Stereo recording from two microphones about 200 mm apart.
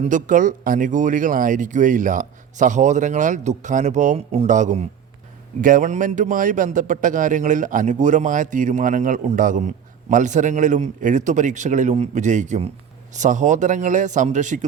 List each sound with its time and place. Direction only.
0.0 s speech: 40° right (ahead or behind)